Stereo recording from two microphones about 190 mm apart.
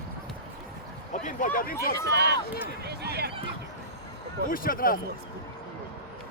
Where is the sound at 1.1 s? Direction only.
40° left (ahead or behind).